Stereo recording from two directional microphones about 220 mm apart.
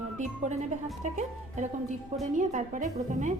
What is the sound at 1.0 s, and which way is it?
A woman's voice, 35° right (ahead or behind).